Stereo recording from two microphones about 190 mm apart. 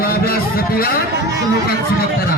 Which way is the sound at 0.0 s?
50° left (ahead or behind).